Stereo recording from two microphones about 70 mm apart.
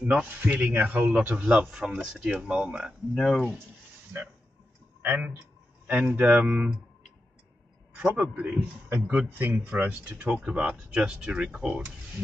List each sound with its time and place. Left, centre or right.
0.0 s speech: centre
2.0 s speech: centre
3.2 s speech: centre
4.1 s speech: right
7.9 s speech: right